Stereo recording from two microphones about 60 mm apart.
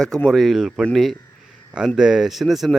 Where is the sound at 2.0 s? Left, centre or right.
Centre.